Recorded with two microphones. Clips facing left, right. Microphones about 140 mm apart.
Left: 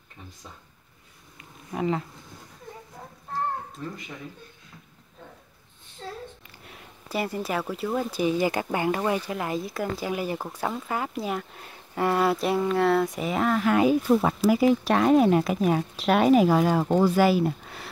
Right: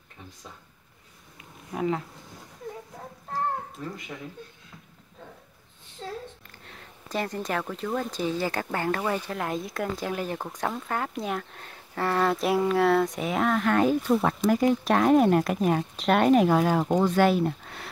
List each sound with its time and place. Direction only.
1.4 s bee: centre (ahead or behind)
6.6 s speech: 10° left (ahead or behind)